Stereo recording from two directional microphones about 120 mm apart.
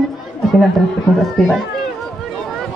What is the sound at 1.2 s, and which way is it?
Speech, 5° left (ahead or behind).